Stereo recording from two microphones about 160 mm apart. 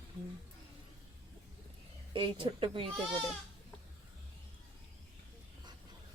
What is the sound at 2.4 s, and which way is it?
Speech, 35° right (ahead or behind).